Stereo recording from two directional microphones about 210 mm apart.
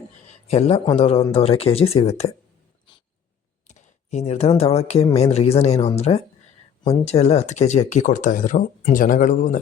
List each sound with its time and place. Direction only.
0.4 s speech: 30° left (ahead or behind)
3.7 s speech: 35° left (ahead or behind)